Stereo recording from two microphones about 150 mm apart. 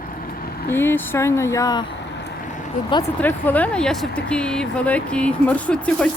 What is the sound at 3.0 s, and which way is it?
Speech, 15° left (ahead or behind).